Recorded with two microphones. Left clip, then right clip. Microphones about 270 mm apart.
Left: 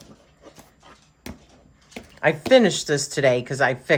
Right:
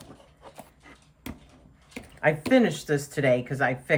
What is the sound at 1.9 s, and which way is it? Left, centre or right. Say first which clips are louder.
Speech: left 3 dB; centre.